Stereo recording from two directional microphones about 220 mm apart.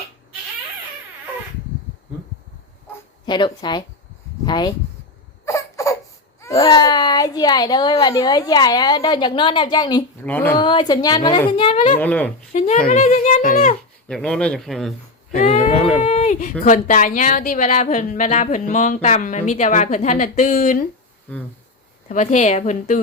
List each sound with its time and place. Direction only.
3.2 s a child's voice: 20° left (ahead or behind)
5.5 s crying: 15° left (ahead or behind)
6.4 s a child's voice: 15° left (ahead or behind)
10.2 s speech: 10° left (ahead or behind)
10.6 s a child's voice: 20° left (ahead or behind)
11.9 s speech: 5° left (ahead or behind)
12.5 s speech: 30° left (ahead or behind)
14.1 s a man's voice: 5° left (ahead or behind)
15.4 s speech: 35° left (ahead or behind)
21.3 s speech: 5° left (ahead or behind)
22.1 s speech: 30° left (ahead or behind)